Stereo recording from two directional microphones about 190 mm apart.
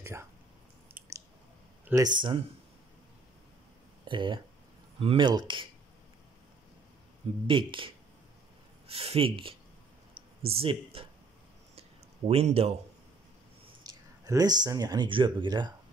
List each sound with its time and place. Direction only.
0.0 s speech: 15° right (ahead or behind)
1.9 s speech: 20° right (ahead or behind)
4.0 s speech: 25° right (ahead or behind)
7.4 s speech: 25° right (ahead or behind)
12.3 s speech: 30° right (ahead or behind)
13.8 s speech: 20° right (ahead or behind)